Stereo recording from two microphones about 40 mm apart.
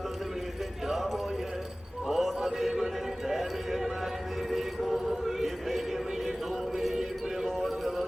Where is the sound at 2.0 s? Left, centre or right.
Centre.